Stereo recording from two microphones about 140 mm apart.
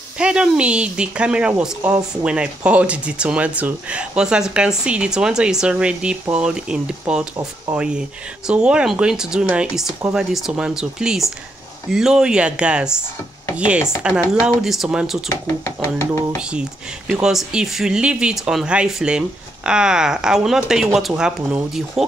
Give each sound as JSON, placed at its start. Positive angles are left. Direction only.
{"t": 0.2, "sound": "speech", "side_deg": -5}
{"t": 15.2, "sound": "speech", "side_deg": 20}
{"t": 16.3, "sound": "speech", "side_deg": -5}